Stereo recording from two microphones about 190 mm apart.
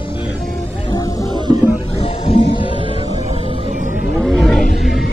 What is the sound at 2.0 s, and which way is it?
Music, 30° left (ahead or behind).